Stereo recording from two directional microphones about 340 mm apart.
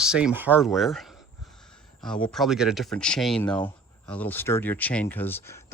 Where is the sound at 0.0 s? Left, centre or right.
Centre.